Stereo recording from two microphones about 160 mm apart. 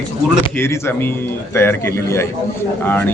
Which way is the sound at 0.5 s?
15° left (ahead or behind).